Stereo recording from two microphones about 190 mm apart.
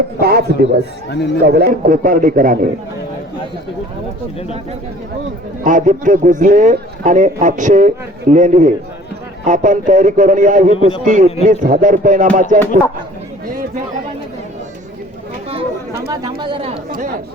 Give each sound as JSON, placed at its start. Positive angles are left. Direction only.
{"t": 0.2, "sound": "speech", "side_deg": -55}
{"t": 1.1, "sound": "speech", "side_deg": 65}
{"t": 1.5, "sound": "a man's voice", "side_deg": -55}
{"t": 5.6, "sound": "a man's voice", "side_deg": -40}
{"t": 16.2, "sound": "a woman's voice", "side_deg": -25}
{"t": 16.9, "sound": "speech", "side_deg": -50}